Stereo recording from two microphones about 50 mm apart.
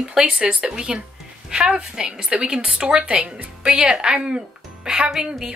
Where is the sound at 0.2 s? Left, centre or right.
Right.